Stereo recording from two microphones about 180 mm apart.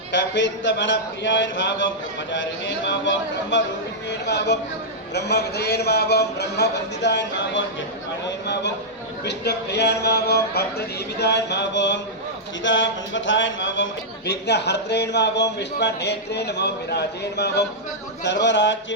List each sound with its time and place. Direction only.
0.1 s a man's voice: 85° left
4.1 s speech: 70° left (ahead or behind)
9.2 s speech: 70° left (ahead or behind)
12.6 s speech: 90° left
14.3 s a man's voice: 70° left (ahead or behind)